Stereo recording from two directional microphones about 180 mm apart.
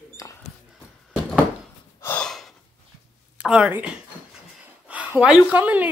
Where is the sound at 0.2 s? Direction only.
20° left (ahead or behind).